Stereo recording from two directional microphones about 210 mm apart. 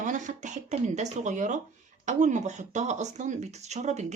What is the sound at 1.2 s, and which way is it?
Speech, 35° right (ahead or behind).